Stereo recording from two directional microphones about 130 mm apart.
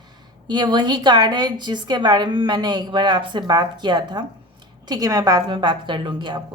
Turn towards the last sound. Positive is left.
turn(degrees=-35)  # may be behind; listen again after turning